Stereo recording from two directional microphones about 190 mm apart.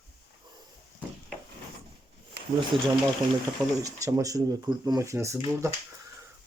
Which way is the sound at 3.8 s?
20° right (ahead or behind).